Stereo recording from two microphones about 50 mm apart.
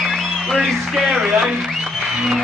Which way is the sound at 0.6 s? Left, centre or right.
Centre.